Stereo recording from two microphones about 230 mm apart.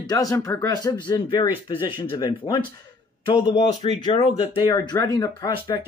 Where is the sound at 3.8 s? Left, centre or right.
Left.